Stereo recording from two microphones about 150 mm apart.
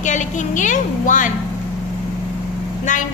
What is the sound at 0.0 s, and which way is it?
A woman's voice, 55° left (ahead or behind).